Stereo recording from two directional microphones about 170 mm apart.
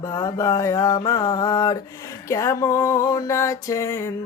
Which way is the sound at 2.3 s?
20° left (ahead or behind).